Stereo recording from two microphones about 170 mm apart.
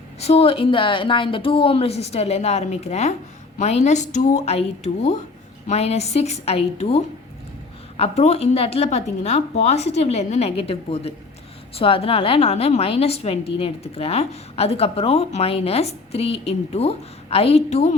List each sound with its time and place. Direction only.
0.2 s a woman's voice: 35° left (ahead or behind)